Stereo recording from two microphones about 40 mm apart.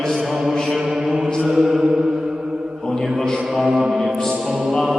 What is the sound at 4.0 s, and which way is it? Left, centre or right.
Music, centre.